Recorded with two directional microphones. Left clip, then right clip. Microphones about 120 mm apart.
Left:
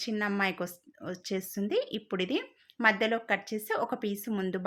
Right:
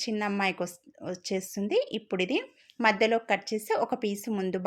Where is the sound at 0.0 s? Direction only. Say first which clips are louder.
Right 1 dB; 25° right (ahead or behind).